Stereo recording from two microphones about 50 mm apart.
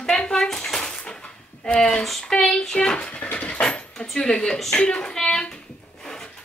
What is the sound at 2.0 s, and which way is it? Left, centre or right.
Speech, centre.